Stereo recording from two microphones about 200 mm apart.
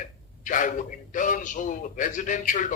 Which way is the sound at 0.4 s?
40° left (ahead or behind).